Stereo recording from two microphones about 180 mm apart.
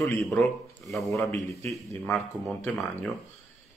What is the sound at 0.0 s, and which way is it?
Speech, 15° left (ahead or behind).